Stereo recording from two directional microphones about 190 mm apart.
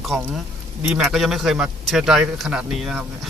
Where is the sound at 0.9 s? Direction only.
Centre (ahead or behind).